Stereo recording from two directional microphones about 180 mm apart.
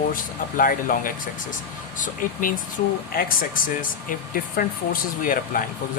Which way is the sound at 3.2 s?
50° left (ahead or behind).